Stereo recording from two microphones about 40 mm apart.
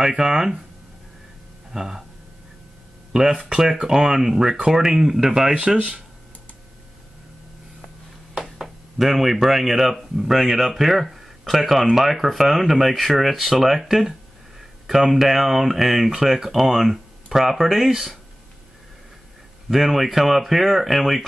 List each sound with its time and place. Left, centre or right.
0.2 s speech: centre
1.7 s speech: centre
3.1 s speech: centre
5.8 s speech: right
8.4 s speech: centre
19.7 s speech: centre